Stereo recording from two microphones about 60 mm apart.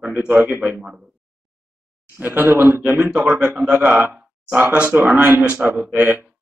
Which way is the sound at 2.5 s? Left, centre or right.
Right.